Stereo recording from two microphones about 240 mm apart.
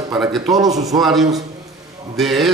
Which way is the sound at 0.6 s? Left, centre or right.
Centre.